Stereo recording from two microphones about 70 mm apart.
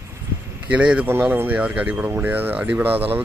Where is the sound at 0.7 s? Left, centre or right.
Centre.